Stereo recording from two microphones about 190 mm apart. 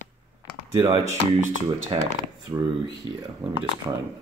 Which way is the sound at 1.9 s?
25° right (ahead or behind).